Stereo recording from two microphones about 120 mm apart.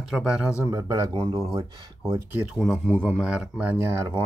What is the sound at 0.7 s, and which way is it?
Speech, 25° right (ahead or behind).